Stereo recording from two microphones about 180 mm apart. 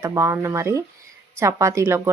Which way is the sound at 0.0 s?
15° right (ahead or behind).